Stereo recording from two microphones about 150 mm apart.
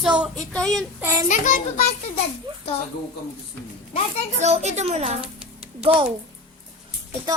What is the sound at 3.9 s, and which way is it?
Speech, 40° left (ahead or behind).